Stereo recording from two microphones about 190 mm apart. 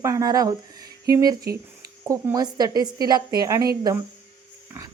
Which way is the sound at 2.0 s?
15° right (ahead or behind).